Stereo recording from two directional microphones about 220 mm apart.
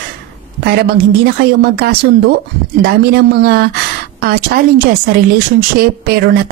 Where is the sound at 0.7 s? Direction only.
50° right (ahead or behind).